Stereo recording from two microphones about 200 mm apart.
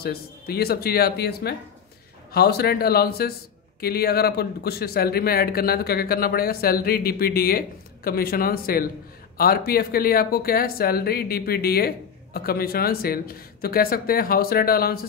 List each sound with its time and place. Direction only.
0.0 s a man's voice: 50° left (ahead or behind)